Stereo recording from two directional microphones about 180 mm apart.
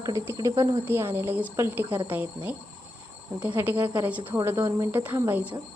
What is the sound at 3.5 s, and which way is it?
Speech, 10° right (ahead or behind).